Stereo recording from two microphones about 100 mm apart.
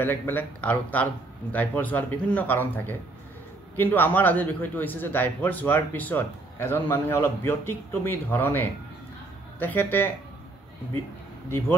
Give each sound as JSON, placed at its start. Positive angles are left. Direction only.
{"t": 0.0, "sound": "a man's voice", "side_deg": 20}